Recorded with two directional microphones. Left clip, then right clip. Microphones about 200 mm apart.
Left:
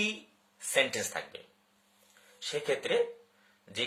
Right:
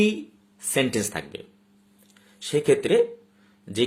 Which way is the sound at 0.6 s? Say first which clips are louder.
Right 4 dB; 30° right (ahead or behind).